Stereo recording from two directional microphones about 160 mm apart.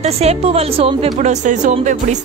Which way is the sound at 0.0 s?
40° right (ahead or behind).